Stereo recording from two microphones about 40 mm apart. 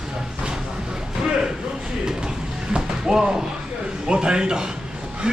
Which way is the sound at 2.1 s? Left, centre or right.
Centre.